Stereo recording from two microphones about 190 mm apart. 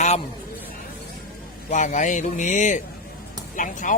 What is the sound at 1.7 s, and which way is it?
Speech, 40° left (ahead or behind).